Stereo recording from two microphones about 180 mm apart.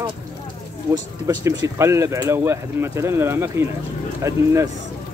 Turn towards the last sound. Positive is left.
turn(degrees=-15)  # may be behind; listen again after turning